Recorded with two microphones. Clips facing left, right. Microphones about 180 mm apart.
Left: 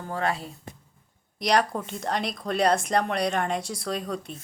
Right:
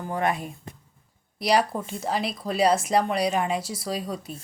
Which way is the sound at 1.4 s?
5° right (ahead or behind).